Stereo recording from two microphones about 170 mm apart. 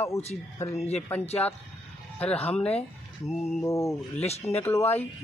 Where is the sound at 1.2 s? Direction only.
35° left (ahead or behind).